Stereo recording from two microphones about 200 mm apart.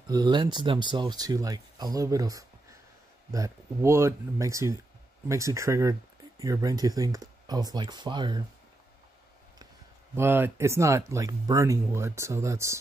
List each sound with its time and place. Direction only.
0.1 s speech: 20° right (ahead or behind)
10.1 s speech: 10° right (ahead or behind)